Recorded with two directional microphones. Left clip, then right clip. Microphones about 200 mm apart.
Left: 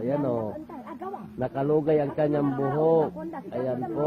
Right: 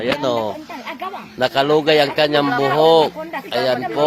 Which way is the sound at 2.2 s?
10° right (ahead or behind).